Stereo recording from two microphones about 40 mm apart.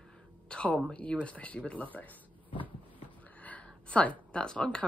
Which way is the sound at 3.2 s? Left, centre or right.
Left.